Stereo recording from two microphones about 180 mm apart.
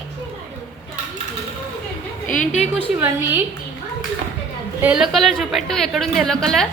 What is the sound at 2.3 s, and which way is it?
Speech, 45° left (ahead or behind).